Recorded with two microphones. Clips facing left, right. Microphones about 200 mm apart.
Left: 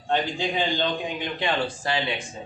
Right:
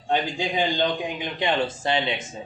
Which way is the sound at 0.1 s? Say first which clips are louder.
Even; 15° right (ahead or behind).